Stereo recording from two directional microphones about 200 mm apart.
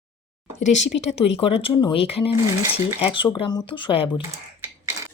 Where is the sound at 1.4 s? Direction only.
25° left (ahead or behind).